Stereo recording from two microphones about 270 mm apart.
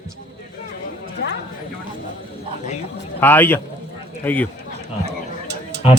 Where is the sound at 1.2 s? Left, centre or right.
Left.